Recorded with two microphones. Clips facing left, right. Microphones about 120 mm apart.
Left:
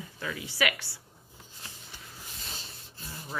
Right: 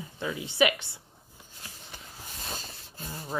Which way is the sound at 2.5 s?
45° right (ahead or behind).